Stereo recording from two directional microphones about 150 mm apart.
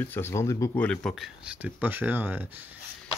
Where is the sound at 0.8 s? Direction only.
Centre (ahead or behind).